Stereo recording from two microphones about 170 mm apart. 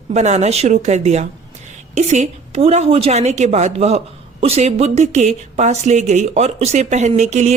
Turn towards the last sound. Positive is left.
turn(degrees=-40)  # may be behind; listen again after turning